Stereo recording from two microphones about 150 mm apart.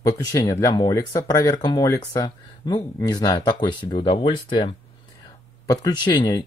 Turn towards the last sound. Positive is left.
turn(degrees=30)  # may be behind; listen again after turning